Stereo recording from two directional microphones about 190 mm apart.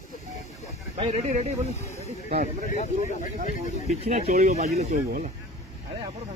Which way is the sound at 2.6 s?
45° left (ahead or behind).